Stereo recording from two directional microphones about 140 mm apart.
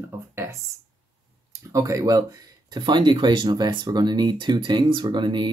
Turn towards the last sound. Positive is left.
turn(degrees=-35)  # may be behind; listen again after turning